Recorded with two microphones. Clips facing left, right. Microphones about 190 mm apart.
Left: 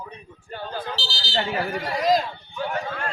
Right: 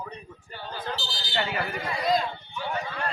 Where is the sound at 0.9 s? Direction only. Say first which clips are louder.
Left 3 dB; 90° left.